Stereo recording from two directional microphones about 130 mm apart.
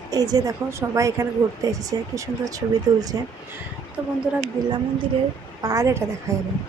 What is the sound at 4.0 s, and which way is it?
Speech, 10° right (ahead or behind).